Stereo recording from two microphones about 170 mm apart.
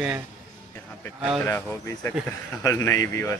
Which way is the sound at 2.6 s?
20° left (ahead or behind).